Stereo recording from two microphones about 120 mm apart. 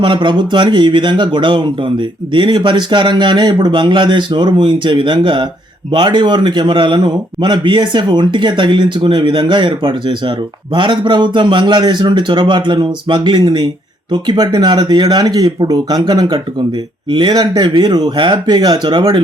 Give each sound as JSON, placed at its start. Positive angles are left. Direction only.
{"t": 0.0, "sound": "speech", "side_deg": -40}